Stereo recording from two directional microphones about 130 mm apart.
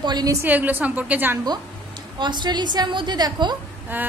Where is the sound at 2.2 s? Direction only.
35° right (ahead or behind).